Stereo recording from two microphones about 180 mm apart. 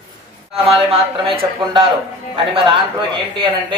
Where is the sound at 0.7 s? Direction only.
30° right (ahead or behind).